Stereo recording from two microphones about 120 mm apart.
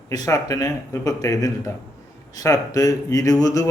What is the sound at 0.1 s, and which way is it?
Speech, 30° left (ahead or behind).